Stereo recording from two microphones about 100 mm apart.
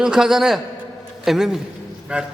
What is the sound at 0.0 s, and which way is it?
A man's voice, 5° right (ahead or behind).